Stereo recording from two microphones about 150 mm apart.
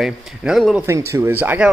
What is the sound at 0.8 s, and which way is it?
Speech, 20° right (ahead or behind).